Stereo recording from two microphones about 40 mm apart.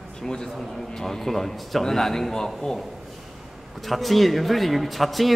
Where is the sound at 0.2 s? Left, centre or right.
Centre.